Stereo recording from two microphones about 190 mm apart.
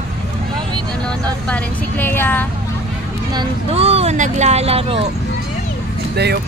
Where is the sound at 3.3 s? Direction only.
25° right (ahead or behind).